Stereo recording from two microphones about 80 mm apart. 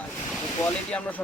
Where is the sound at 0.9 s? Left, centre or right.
Centre.